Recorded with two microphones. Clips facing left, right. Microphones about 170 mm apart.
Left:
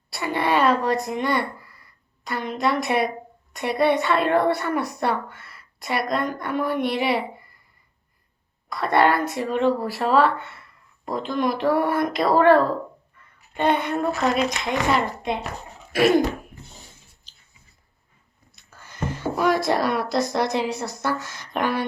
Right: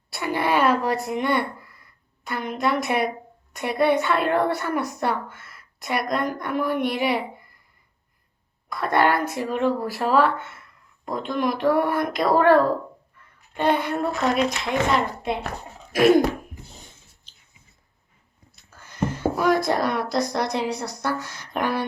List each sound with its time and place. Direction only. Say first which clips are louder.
0.1 s a woman's voice: even; centre (ahead or behind)
8.7 s a woman's voice: left 1 dB; centre (ahead or behind)
19.4 s a woman's voice: left 1 dB; 5° left (ahead or behind)